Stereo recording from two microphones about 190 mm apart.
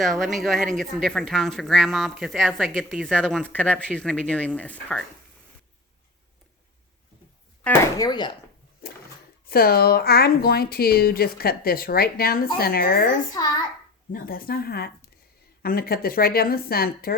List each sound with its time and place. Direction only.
0.0 s speech: centre (ahead or behind)
7.6 s speech: 15° left (ahead or behind)
9.5 s a woman's voice: 55° left (ahead or behind)